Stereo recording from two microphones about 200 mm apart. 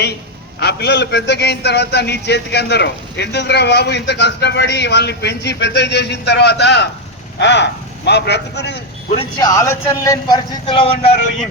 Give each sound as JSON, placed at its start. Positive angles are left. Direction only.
{"t": 0.6, "sound": "a man's voice", "side_deg": 55}
{"t": 9.1, "sound": "speech", "side_deg": 20}